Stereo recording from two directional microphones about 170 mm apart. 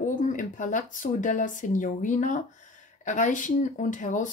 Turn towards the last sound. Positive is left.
turn(degrees=45)  # may be behind; listen again after turning